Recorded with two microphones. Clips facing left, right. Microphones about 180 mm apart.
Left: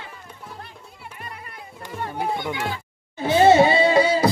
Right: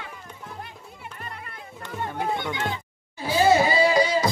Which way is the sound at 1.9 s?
10° left (ahead or behind).